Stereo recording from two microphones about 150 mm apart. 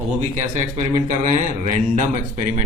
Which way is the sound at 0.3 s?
55° right (ahead or behind).